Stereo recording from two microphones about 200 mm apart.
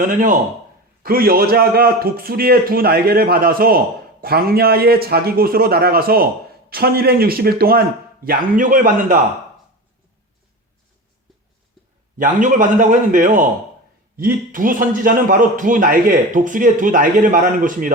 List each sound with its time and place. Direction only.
0.0 s a man's voice: 40° right (ahead or behind)
12.1 s a man's voice: 40° right (ahead or behind)